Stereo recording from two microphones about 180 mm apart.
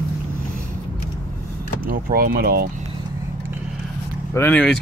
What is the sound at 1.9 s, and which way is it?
Speech, 55° right (ahead or behind).